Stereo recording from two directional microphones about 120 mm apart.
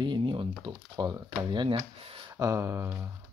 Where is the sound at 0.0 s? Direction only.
40° right (ahead or behind).